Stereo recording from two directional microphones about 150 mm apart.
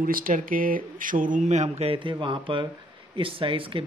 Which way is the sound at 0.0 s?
65° right (ahead or behind).